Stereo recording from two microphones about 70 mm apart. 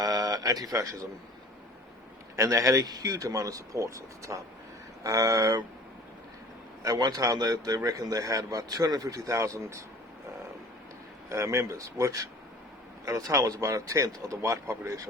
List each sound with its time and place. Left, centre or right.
0.0 s a sound: right
2.3 s speech: right
6.8 s a man's voice: right
11.3 s speech: right